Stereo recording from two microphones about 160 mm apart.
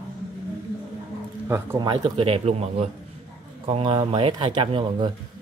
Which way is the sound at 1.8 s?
30° right (ahead or behind).